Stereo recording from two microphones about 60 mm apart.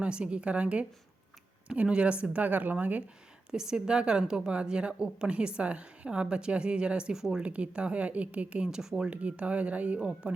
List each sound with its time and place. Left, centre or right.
0.0 s speech: centre
3.5 s a woman's voice: centre
7.4 s speech: right
8.8 s a woman's voice: centre
9.0 s speech: right